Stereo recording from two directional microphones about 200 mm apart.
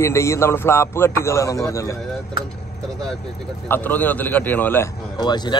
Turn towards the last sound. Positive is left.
turn(degrees=20)  # may be behind; listen again after turning